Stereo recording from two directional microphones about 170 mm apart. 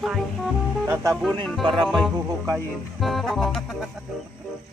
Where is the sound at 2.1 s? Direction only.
20° right (ahead or behind).